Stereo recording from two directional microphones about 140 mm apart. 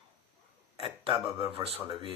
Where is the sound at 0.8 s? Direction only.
40° right (ahead or behind).